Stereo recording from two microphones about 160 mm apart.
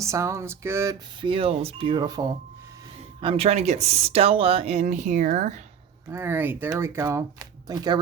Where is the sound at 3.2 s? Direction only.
35° right (ahead or behind); by 5.6 s 50° right (ahead or behind).